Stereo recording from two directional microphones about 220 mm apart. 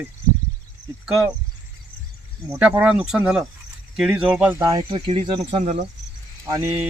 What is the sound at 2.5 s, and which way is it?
Speech, 5° right (ahead or behind).